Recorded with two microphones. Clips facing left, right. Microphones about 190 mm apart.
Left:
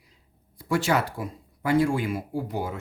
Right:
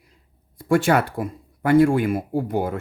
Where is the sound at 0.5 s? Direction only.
50° right (ahead or behind).